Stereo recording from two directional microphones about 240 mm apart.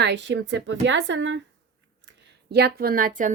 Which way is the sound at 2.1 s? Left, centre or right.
Right.